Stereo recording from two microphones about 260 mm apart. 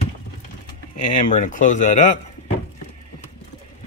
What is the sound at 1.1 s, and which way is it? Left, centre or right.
Speech, left.